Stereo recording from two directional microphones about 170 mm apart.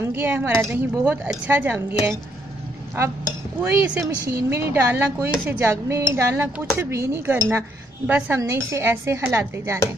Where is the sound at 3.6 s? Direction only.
10° right (ahead or behind).